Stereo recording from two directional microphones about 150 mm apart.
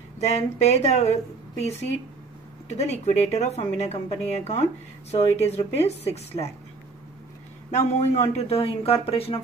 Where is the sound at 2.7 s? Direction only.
45° left (ahead or behind).